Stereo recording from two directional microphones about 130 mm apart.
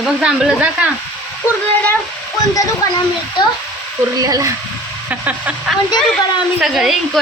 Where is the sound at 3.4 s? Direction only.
35° left (ahead or behind).